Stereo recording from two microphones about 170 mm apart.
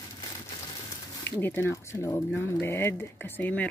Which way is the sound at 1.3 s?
15° left (ahead or behind).